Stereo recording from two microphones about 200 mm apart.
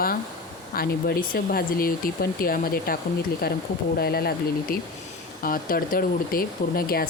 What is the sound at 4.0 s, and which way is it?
Speech, 50° left (ahead or behind).